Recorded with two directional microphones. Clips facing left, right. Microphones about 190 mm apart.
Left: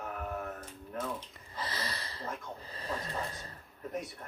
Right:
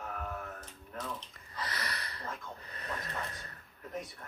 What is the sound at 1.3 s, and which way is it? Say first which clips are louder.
Snort: left 1 dB; 25° left (ahead or behind).